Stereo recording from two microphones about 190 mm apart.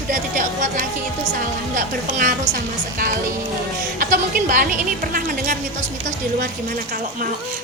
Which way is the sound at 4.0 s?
45° right (ahead or behind).